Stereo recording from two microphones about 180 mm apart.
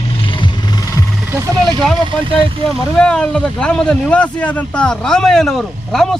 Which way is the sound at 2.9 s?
5° left (ahead or behind).